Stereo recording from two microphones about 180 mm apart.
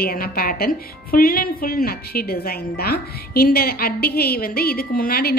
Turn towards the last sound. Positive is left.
turn(degrees=55)  # may be behind; listen again after turning